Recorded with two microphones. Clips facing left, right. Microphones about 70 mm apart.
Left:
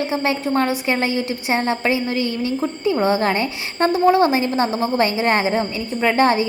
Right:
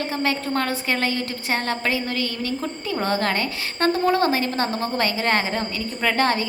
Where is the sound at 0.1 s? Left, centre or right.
Left.